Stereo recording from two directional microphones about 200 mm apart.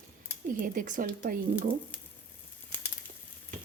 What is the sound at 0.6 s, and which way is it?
A woman's voice, 40° right (ahead or behind).